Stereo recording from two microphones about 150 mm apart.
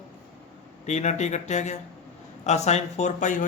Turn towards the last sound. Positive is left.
turn(degrees=60)  # may be behind; listen again after turning